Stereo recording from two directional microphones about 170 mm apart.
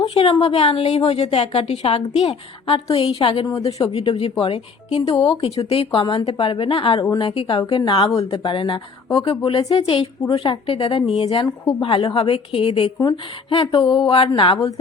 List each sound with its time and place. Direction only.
0.0 s a woman's voice: 30° left (ahead or behind)